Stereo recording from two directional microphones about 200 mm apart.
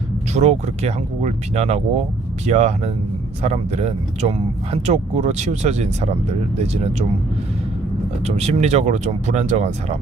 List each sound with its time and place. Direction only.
0.3 s speech: 35° right (ahead or behind)
8.2 s speech: 35° right (ahead or behind)